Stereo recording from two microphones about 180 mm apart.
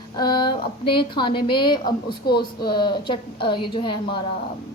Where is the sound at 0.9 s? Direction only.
25° left (ahead or behind).